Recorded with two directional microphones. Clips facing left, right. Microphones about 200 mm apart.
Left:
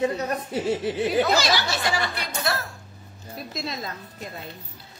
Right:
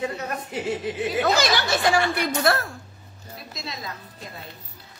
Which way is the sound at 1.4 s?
50° right (ahead or behind).